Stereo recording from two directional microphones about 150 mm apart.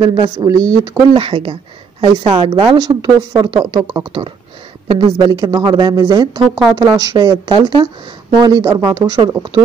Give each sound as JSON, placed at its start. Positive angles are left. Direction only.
{"t": 0.0, "sound": "a woman's voice", "side_deg": -30}
{"t": 1.2, "sound": "a woman's voice", "side_deg": -35}